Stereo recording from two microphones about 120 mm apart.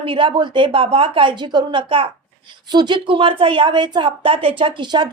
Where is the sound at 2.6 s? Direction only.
35° right (ahead or behind).